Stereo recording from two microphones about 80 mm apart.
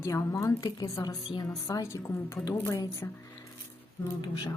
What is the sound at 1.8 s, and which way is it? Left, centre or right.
A woman's voice, left.